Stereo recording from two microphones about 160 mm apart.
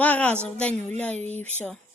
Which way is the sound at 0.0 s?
10° left (ahead or behind).